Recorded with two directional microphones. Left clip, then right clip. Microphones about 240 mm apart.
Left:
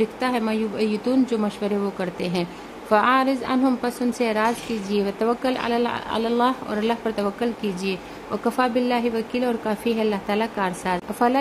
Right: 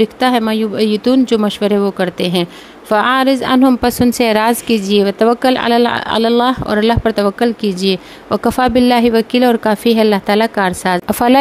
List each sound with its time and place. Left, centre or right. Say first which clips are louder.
0.0 s a woman's voice: right 10 dB; right